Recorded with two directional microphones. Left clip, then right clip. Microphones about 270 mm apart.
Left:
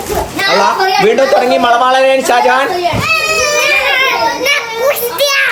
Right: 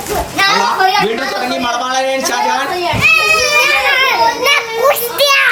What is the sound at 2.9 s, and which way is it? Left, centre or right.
Children playing, centre.